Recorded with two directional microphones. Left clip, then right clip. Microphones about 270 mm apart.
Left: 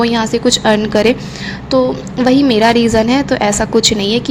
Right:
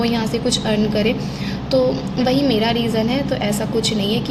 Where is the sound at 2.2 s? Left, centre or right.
Left.